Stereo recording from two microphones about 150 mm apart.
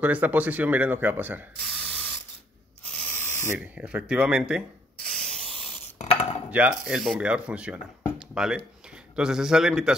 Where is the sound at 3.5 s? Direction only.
10° right (ahead or behind).